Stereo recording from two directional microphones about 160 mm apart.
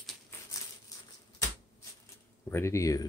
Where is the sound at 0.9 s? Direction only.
25° left (ahead or behind).